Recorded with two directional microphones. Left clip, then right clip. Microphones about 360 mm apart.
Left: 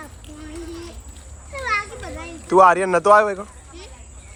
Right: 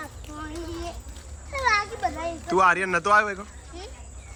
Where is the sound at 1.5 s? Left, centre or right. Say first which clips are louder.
Even; right.